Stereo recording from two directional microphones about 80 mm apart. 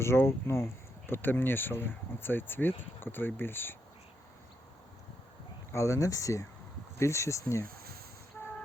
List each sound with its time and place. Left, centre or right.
0.0 s speech: left
5.7 s speech: left